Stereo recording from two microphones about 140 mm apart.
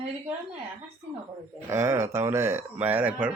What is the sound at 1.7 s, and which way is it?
Speech, 20° right (ahead or behind).